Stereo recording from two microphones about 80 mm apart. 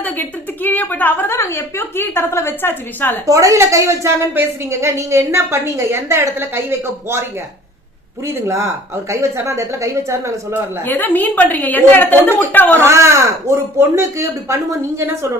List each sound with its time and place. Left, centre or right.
0.0 s a woman's voice: left
3.2 s speech: right
8.3 s speech: right
10.8 s a woman's voice: left
12.8 s speech: right